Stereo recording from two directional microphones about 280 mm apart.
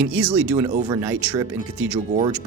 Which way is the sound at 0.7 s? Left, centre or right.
Right.